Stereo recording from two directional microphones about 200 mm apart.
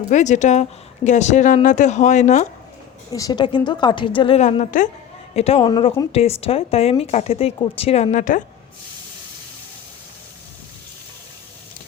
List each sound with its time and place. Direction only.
0.1 s speech: 35° left (ahead or behind)
3.1 s a woman's voice: 20° left (ahead or behind)
5.6 s a woman's voice: 20° left (ahead or behind)
6.1 s speech: 30° left (ahead or behind)